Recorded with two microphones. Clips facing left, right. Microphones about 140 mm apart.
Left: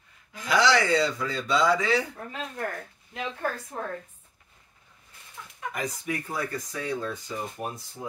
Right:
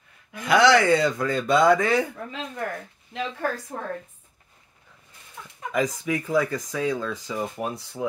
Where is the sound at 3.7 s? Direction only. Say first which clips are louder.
Right 1 dB; 90° right.